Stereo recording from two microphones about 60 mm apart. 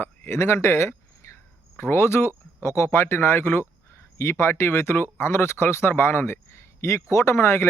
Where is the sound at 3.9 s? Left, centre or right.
Left.